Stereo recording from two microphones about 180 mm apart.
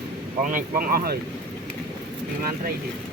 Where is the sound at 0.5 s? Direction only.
55° right (ahead or behind).